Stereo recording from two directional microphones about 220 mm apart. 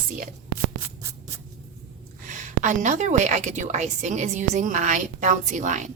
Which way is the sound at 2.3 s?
35° right (ahead or behind).